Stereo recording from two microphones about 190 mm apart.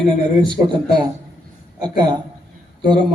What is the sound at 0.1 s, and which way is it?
Speech, 25° right (ahead or behind).